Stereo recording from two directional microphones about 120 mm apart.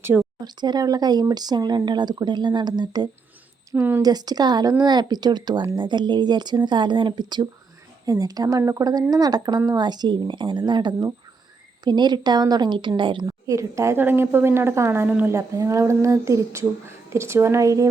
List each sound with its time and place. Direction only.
0.0 s speech: 15° right (ahead or behind)
0.4 s speech: 35° right (ahead or behind)
3.7 s a woman's voice: 20° right (ahead or behind)
4.0 s speech: 35° right (ahead or behind)
13.2 s a woman's voice: 25° right (ahead or behind); by 15.3 s 10° right (ahead or behind)
15.3 s a woman's voice: 25° right (ahead or behind)